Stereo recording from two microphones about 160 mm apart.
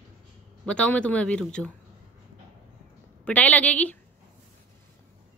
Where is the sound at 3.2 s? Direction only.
10° left (ahead or behind).